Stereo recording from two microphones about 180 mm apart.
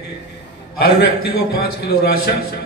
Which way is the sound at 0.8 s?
60° left (ahead or behind).